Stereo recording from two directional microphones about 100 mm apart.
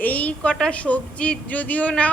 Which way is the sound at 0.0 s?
15° left (ahead or behind).